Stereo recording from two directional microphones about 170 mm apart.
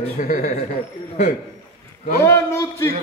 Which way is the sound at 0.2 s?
50° left (ahead or behind).